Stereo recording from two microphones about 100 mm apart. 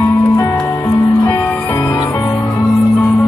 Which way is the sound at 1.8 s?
35° left (ahead or behind).